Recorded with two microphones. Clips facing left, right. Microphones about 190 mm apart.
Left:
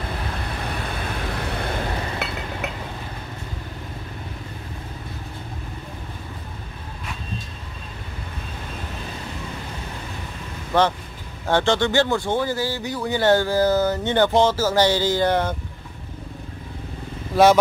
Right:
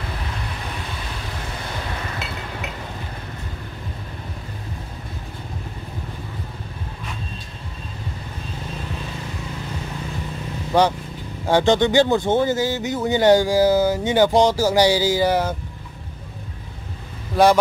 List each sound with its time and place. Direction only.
2.2 s chink: 60° left (ahead or behind)
10.7 s speech: 15° right (ahead or behind)
17.3 s speech: centre (ahead or behind)